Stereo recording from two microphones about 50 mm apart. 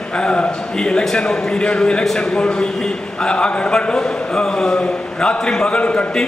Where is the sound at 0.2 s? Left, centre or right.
Centre.